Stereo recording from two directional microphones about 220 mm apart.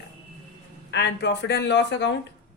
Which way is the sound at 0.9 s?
50° left (ahead or behind).